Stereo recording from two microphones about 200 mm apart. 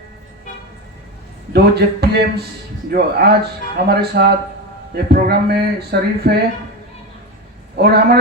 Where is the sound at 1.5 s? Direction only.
55° right (ahead or behind).